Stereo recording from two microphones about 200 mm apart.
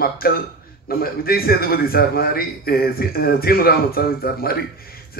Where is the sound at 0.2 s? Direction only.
50° left (ahead or behind).